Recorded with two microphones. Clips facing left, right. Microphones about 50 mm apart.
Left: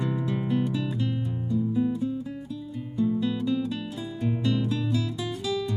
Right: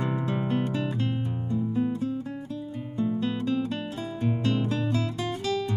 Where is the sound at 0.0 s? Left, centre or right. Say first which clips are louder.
Even; right.